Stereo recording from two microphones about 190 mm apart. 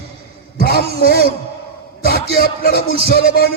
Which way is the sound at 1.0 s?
50° left (ahead or behind).